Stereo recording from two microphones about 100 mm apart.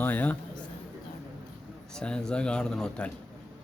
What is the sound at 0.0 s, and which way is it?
Speech, 15° left (ahead or behind).